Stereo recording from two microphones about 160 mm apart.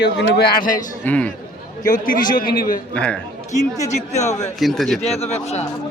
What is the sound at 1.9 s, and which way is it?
Speech, 60° left (ahead or behind).